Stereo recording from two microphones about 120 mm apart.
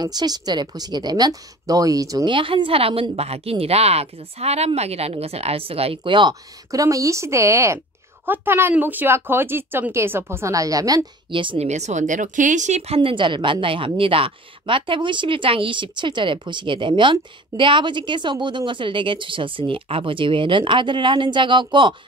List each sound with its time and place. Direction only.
0.0 s a woman's voice: 35° right (ahead or behind)
2.2 s speech: 45° right (ahead or behind)
6.7 s speech: 30° right (ahead or behind)
11.2 s speech: 45° right (ahead or behind)
11.6 s speech: 70° right (ahead or behind); by 21.9 s 40° right (ahead or behind)